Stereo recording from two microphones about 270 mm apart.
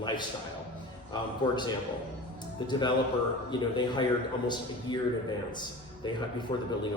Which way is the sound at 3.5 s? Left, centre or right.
Centre.